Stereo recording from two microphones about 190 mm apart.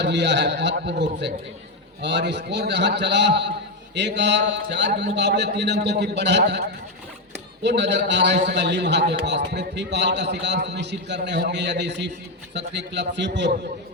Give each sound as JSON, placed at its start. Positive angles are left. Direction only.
{"t": 0.0, "sound": "a man's voice", "side_deg": -65}
{"t": 3.9, "sound": "mantra", "side_deg": -65}
{"t": 5.1, "sound": "a man's voice", "side_deg": -65}
{"t": 7.6, "sound": "mantra", "side_deg": -65}
{"t": 8.4, "sound": "a man's voice", "side_deg": -65}